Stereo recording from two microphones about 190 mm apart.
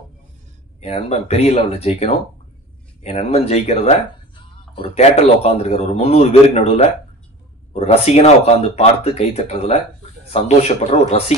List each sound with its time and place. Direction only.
0.7 s speech: 35° left (ahead or behind)
10.9 s speech: 35° left (ahead or behind)